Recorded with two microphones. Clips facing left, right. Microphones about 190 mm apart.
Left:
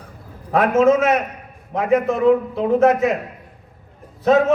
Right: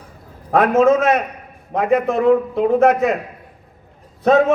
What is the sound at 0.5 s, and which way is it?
A man's voice, 55° right (ahead or behind).